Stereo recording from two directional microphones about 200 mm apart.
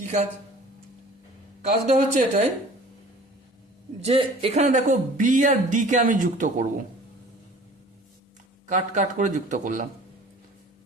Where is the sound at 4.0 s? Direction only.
30° right (ahead or behind).